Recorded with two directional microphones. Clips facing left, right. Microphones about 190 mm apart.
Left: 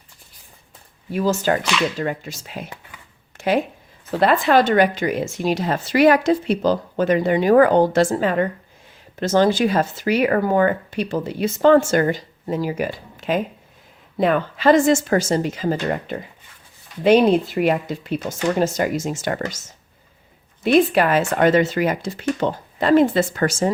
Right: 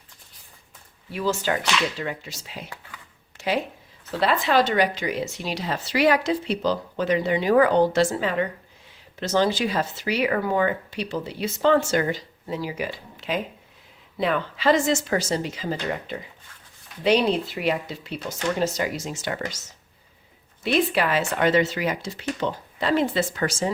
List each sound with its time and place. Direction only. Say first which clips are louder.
1.1 s speech: left 5 dB; 45° left (ahead or behind)
3.3 s a sound: left 5 dB; 50° left (ahead or behind)
4.2 s speech: left 5 dB; 50° left (ahead or behind)
20.7 s speech: left 6 dB; 50° left (ahead or behind)